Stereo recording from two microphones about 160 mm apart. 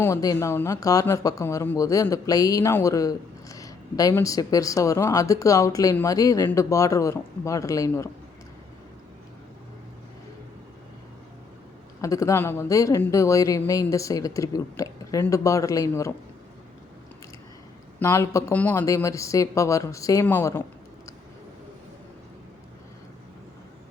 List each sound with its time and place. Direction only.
0.0 s speech: 20° left (ahead or behind)
12.0 s speech: 20° left (ahead or behind)
18.0 s speech: 15° left (ahead or behind)